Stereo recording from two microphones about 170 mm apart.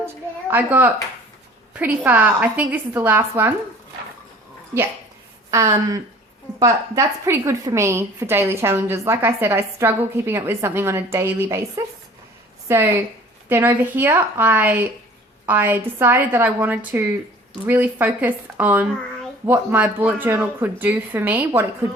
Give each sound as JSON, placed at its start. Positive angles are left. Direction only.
{"t": 0.5, "sound": "a woman's voice", "side_deg": -10}
{"t": 2.0, "sound": "a woman's voice", "side_deg": -10}
{"t": 5.5, "sound": "a woman's voice", "side_deg": -20}
{"t": 12.6, "sound": "a woman's voice", "side_deg": -15}